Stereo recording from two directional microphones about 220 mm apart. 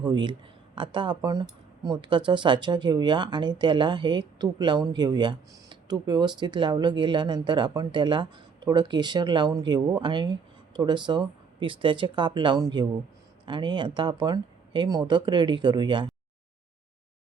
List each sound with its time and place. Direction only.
0.0 s speech: 20° right (ahead or behind)